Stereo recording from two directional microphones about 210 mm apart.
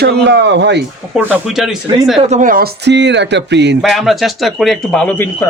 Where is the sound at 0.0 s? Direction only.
55° right (ahead or behind).